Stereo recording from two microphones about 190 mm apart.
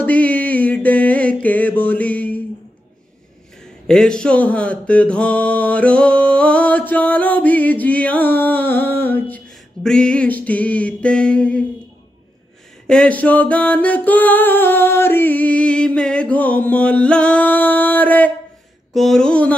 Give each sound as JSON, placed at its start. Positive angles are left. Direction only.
{"t": 0.0, "sound": "music", "side_deg": 10}
{"t": 3.8, "sound": "mantra", "side_deg": 5}
{"t": 12.8, "sound": "mantra", "side_deg": 5}
{"t": 18.9, "sound": "speech", "side_deg": 0}